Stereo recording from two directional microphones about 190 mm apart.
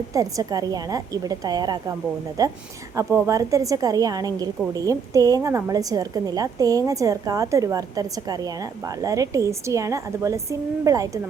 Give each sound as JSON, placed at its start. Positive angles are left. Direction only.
{"t": 0.1, "sound": "a woman's voice", "side_deg": -15}